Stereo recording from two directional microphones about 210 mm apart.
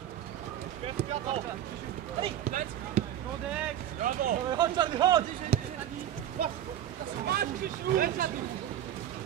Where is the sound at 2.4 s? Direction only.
40° right (ahead or behind).